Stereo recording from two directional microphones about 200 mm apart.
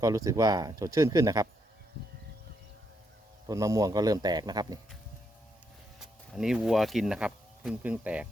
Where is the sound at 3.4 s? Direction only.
15° right (ahead or behind).